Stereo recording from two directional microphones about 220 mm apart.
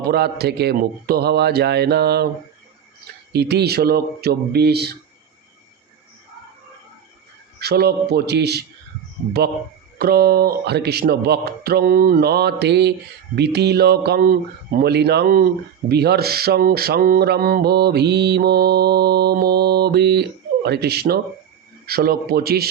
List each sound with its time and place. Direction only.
0.0 s speech: 45° right (ahead or behind)
7.6 s speech: 45° right (ahead or behind)
10.0 s speech: 45° right (ahead or behind)